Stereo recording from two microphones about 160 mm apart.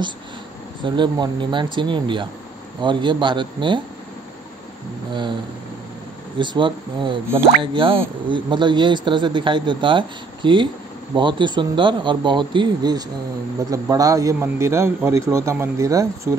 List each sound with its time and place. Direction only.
0.8 s a man's voice: 30° right (ahead or behind)
6.3 s a man's voice: 30° right (ahead or behind)